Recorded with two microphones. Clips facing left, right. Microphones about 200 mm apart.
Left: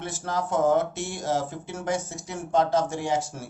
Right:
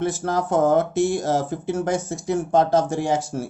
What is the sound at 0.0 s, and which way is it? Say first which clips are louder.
Speech: right 7 dB; 45° right (ahead or behind).